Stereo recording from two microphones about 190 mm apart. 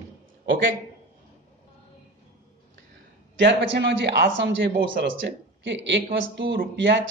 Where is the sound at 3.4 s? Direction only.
70° right (ahead or behind).